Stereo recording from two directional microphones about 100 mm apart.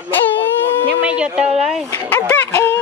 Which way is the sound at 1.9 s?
20° left (ahead or behind).